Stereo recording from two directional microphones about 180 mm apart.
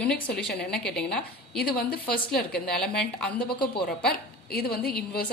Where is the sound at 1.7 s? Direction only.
60° left (ahead or behind).